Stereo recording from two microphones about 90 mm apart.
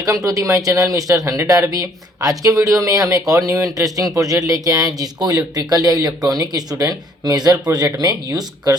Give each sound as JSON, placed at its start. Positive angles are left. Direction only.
{"t": 0.0, "sound": "speech", "side_deg": -40}